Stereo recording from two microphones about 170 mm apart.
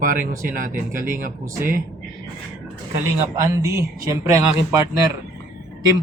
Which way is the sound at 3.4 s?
15° right (ahead or behind).